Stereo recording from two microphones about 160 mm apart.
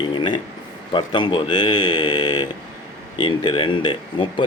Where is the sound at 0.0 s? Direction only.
30° left (ahead or behind).